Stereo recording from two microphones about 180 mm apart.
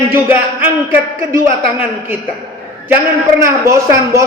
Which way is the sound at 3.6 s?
15° right (ahead or behind).